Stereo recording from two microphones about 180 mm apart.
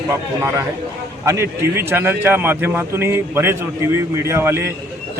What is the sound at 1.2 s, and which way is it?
A man's voice, 15° right (ahead or behind).